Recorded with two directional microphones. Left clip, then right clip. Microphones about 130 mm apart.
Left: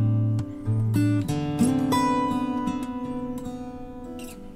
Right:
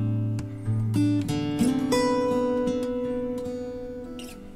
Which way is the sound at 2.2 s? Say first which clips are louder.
Right 2 dB; 35° left (ahead or behind).